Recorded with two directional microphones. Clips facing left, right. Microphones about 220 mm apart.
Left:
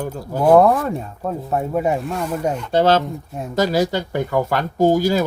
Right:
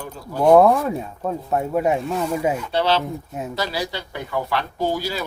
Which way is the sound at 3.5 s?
45° left (ahead or behind).